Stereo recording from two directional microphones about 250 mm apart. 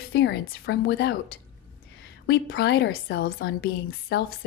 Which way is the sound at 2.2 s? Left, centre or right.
Left.